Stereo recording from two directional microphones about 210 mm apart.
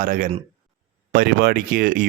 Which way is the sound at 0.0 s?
40° right (ahead or behind).